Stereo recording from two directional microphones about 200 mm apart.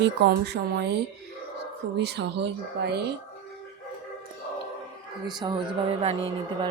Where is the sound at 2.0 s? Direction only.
55° right (ahead or behind).